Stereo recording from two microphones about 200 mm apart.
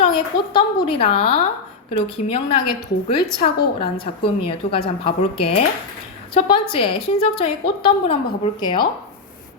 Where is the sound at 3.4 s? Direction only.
25° left (ahead or behind).